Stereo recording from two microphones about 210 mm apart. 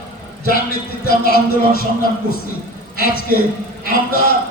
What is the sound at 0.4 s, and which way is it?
A man's voice, 45° left (ahead or behind).